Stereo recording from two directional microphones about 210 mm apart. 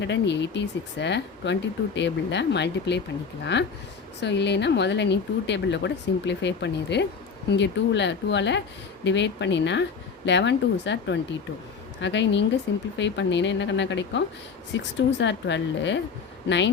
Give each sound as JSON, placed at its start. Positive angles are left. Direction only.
{"t": 0.0, "sound": "speech", "side_deg": 55}